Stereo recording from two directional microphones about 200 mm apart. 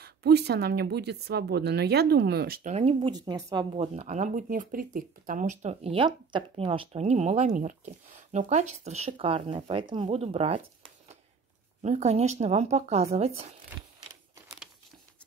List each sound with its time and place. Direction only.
0.0 s speech: 55° right (ahead or behind)
2.7 s a woman's voice: 30° right (ahead or behind)
3.7 s speech: 30° right (ahead or behind)